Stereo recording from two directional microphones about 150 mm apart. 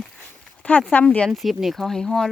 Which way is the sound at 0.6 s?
10° left (ahead or behind).